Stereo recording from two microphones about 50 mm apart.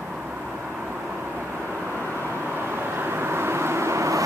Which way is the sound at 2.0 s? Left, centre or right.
Right.